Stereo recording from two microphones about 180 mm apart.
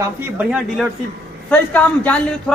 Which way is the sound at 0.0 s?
5° right (ahead or behind).